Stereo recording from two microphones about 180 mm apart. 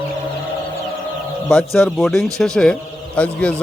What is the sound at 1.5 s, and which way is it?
A man's voice, 5° left (ahead or behind).